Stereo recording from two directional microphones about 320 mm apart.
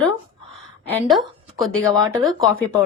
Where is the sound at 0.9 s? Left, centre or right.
Centre.